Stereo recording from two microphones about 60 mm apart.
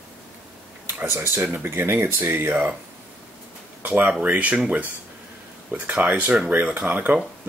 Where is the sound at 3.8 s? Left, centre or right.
Right.